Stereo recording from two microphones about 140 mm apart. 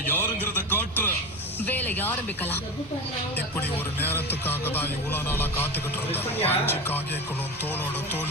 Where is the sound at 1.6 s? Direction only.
15° left (ahead or behind).